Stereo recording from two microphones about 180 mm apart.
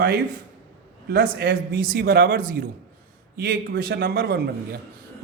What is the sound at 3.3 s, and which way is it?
A man's voice, 65° right (ahead or behind).